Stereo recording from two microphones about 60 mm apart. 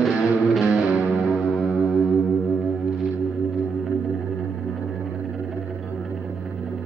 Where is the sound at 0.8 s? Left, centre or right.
Centre.